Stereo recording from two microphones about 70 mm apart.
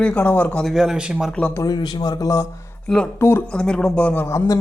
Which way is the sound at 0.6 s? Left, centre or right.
Centre.